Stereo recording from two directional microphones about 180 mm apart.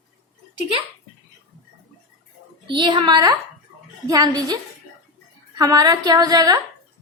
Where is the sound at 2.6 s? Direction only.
25° right (ahead or behind).